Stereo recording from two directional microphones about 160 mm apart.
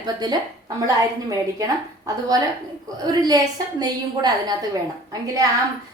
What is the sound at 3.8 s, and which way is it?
Speech, 25° right (ahead or behind).